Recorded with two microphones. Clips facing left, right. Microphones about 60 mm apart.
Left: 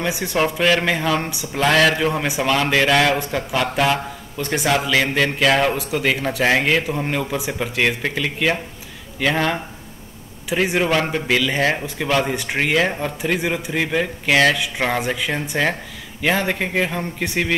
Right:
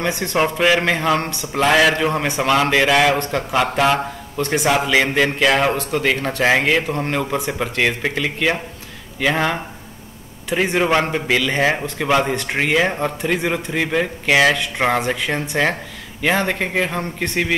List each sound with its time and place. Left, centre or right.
0.0 s a man's voice: centre
0.4 s a man's voice: centre
1.2 s a man's voice: centre